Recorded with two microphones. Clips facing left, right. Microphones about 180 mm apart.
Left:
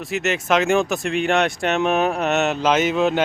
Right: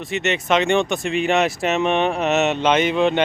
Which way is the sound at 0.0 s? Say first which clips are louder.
Even; centre (ahead or behind).